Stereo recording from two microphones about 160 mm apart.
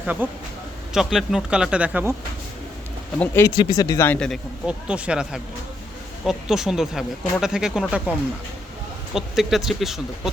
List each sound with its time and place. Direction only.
0.0 s speech: 10° right (ahead or behind)
3.2 s speech: 15° left (ahead or behind)
4.6 s speech: 5° right (ahead or behind)
9.1 s speech: centre (ahead or behind)